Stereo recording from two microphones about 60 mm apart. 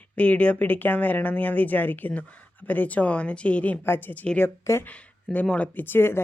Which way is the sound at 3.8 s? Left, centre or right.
Left.